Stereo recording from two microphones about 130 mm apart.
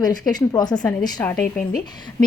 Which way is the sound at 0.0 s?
30° left (ahead or behind).